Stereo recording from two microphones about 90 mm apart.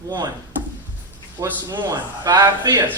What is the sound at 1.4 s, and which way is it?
A man's voice, 50° right (ahead or behind).